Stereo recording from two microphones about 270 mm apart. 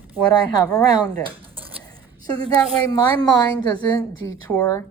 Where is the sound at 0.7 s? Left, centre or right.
Centre.